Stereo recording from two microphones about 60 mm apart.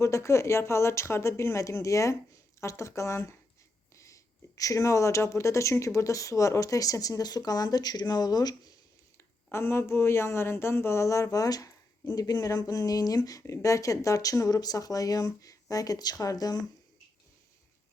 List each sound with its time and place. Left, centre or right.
0.0 s speech: left
9.5 s speech: left
13.5 s speech: left
15.7 s speech: left